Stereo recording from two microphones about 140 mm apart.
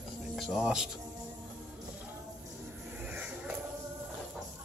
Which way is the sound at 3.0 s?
10° right (ahead or behind).